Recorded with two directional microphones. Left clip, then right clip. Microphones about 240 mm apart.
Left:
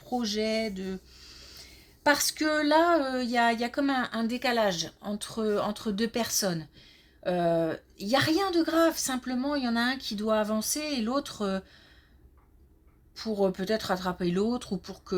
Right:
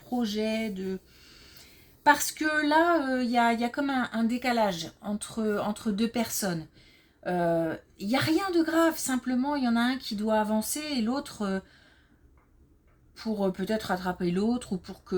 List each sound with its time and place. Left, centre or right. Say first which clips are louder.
0.2 s a woman's voice: left 1 dB; left
13.1 s a woman's voice: left 2 dB; left